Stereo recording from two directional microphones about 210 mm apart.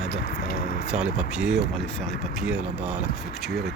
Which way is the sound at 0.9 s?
5° right (ahead or behind).